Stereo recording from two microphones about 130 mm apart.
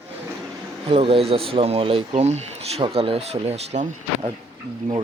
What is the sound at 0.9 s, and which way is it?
Speech, 50° right (ahead or behind).